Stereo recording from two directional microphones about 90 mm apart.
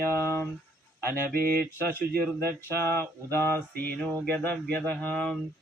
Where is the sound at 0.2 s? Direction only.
30° left (ahead or behind).